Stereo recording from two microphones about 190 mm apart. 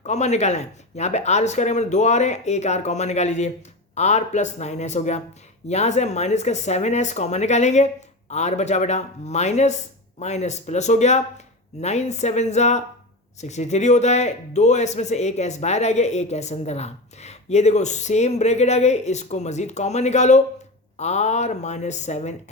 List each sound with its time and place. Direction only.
0.0 s speech: 35° left (ahead or behind)